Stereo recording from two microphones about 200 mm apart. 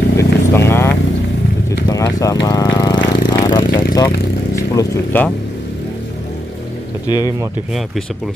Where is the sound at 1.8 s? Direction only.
20° left (ahead or behind).